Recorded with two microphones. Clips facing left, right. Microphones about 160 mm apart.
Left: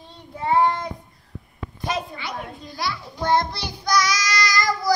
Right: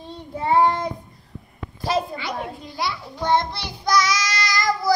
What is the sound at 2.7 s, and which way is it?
Speech, 25° right (ahead or behind).